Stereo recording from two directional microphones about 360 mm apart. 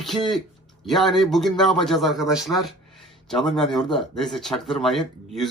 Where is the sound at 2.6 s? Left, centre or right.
Centre.